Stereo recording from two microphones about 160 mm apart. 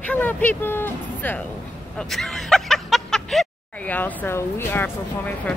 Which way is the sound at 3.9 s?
15° left (ahead or behind).